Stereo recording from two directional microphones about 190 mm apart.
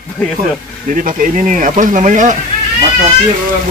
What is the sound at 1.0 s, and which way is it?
Speech, 45° right (ahead or behind).